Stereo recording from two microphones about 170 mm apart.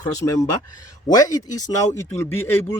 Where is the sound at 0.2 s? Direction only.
20° left (ahead or behind).